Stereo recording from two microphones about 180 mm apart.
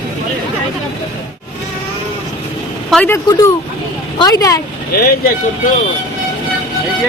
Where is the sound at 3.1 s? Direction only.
15° left (ahead or behind).